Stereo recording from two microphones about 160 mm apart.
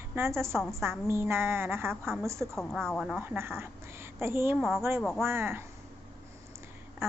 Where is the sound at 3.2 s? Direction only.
15° right (ahead or behind).